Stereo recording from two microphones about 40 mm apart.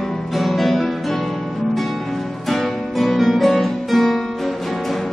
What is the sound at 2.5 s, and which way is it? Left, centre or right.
Music, centre.